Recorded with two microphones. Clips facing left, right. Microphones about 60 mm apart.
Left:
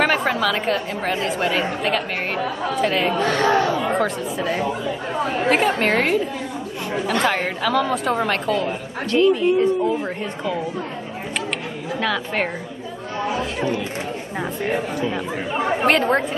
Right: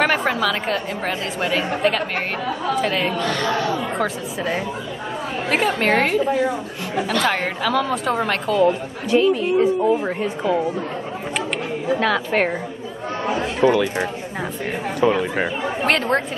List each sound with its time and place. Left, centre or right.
0.0 s a woman's voice: centre
3.2 s speech: left
3.9 s a woman's voice: centre
7.2 s a woman's voice: centre
12.0 s a woman's voice: centre
15.0 s speech: right
15.8 s a woman's voice: centre